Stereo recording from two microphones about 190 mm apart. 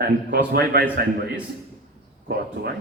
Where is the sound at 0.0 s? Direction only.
55° right (ahead or behind).